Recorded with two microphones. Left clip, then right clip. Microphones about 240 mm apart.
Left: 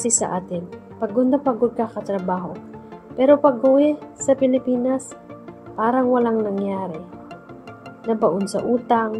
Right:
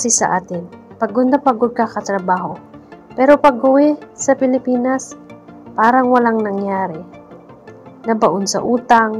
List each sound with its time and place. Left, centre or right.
0.0 s speech: right
8.1 s speech: right